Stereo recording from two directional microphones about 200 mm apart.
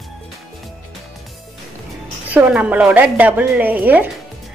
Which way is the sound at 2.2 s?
5° right (ahead or behind).